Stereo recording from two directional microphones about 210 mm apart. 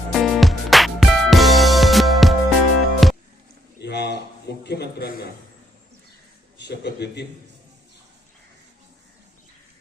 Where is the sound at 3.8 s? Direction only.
55° left (ahead or behind).